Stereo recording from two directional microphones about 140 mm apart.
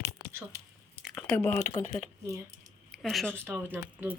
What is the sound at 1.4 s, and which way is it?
Speech, 15° left (ahead or behind).